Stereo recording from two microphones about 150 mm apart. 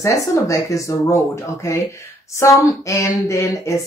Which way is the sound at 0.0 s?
20° left (ahead or behind).